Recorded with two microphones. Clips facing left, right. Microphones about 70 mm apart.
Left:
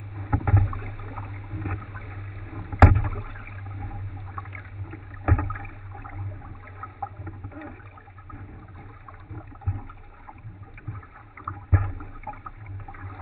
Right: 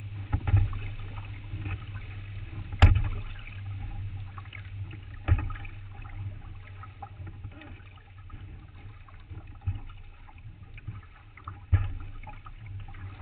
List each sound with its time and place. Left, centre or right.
0.1 s boat: left
4.4 s rowboat: left
7.0 s boat: left
9.3 s water: left
11.5 s rowboat: left
12.0 s toilet flush: left